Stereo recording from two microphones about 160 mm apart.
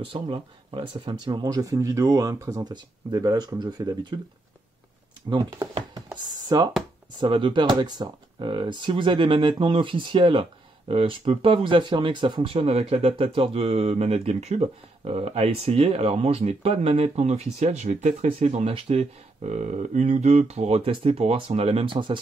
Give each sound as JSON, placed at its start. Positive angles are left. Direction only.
{"t": 0.0, "sound": "speech", "side_deg": -30}
{"t": 5.3, "sound": "speech", "side_deg": -25}
{"t": 12.5, "sound": "speech", "side_deg": -40}